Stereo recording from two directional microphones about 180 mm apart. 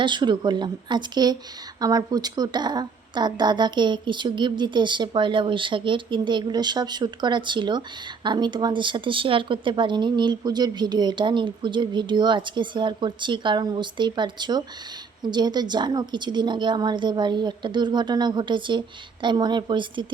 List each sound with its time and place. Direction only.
0.0 s speech: 25° right (ahead or behind)